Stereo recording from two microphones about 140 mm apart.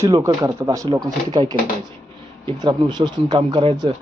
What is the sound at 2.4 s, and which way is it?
Speech, 30° right (ahead or behind).